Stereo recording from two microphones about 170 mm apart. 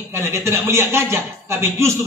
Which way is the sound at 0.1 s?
15° right (ahead or behind).